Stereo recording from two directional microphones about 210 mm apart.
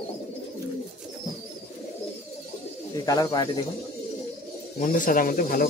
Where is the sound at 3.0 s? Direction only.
15° left (ahead or behind).